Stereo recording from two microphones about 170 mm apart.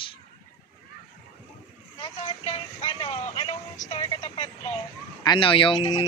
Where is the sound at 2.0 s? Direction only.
35° left (ahead or behind).